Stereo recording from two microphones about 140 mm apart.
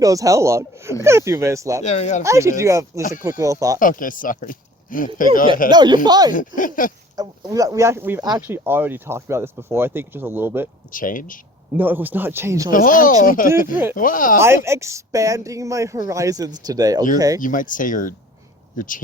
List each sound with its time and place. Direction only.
0.0 s a woman's voice: 25° right (ahead or behind)
1.8 s speech: 55° left (ahead or behind)
2.2 s a woman's voice: 20° right (ahead or behind)
3.0 s speech: 70° left (ahead or behind)
3.2 s a woman's voice: 20° right (ahead or behind)
3.8 s speech: 75° left (ahead or behind)
5.7 s a woman's voice: 30° right (ahead or behind)
6.6 s speech: 75° left (ahead or behind)
7.2 s a woman's voice: 25° right (ahead or behind)
10.9 s speech: 75° left (ahead or behind)
11.7 s speech: 15° right (ahead or behind)
12.7 s speech: 75° left (ahead or behind)
14.3 s a woman's voice: 20° right (ahead or behind)
17.4 s speech: 70° left (ahead or behind)